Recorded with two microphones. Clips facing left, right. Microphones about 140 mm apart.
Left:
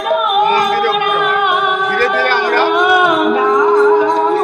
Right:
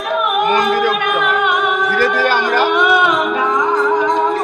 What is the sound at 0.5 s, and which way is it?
Music, 15° right (ahead or behind).